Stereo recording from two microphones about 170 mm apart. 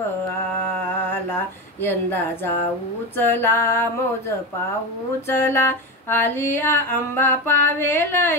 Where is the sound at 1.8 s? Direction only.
15° left (ahead or behind).